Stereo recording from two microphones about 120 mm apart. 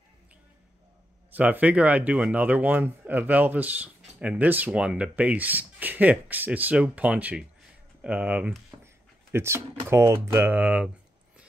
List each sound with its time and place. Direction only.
1.3 s speech: 15° right (ahead or behind)
8.8 s speech: 20° right (ahead or behind)